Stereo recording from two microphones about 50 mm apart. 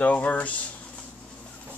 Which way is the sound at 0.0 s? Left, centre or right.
Left.